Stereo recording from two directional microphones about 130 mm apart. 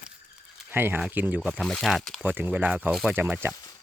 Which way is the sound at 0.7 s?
15° right (ahead or behind).